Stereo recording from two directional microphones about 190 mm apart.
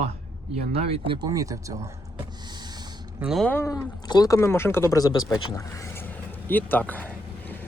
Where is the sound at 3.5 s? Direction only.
15° left (ahead or behind).